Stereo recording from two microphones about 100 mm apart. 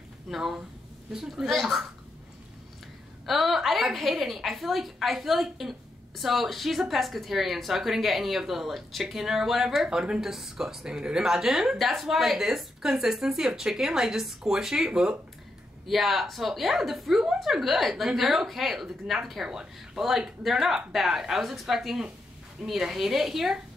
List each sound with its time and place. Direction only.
0.3 s a woman's voice: centre (ahead or behind)
3.3 s a woman's voice: centre (ahead or behind)